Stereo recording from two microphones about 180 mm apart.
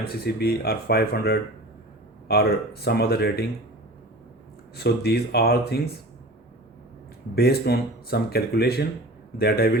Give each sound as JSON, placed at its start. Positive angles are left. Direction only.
{"t": 0.0, "sound": "speech", "side_deg": 60}
{"t": 4.8, "sound": "speech", "side_deg": 65}
{"t": 7.3, "sound": "speech", "side_deg": 60}